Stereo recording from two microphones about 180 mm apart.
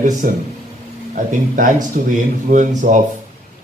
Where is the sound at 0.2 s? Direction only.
50° right (ahead or behind).